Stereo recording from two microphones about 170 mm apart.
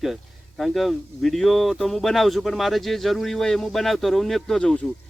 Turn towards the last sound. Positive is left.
turn(degrees=5)  # may be behind; listen again after turning